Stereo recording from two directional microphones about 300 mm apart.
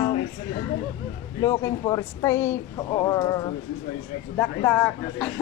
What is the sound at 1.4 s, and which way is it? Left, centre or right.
Speech, centre.